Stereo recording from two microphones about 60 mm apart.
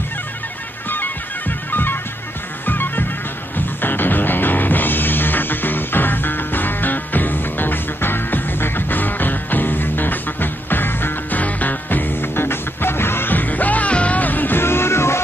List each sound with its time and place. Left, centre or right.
0.8 s bagpipes: left
1.7 s music: left